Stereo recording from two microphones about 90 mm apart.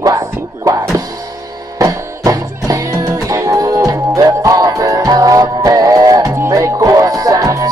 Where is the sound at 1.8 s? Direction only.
40° right (ahead or behind).